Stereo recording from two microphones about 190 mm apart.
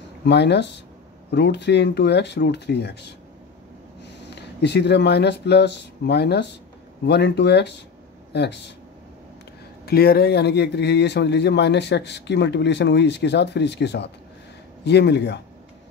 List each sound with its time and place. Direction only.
0.2 s a man's voice: 65° left (ahead or behind)
4.4 s a man's voice: 65° left (ahead or behind)
9.8 s a man's voice: 55° left (ahead or behind)